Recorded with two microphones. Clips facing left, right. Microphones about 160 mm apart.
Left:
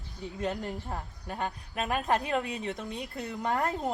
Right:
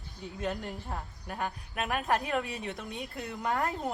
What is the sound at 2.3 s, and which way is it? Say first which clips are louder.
Speech: left 2 dB; centre (ahead or behind).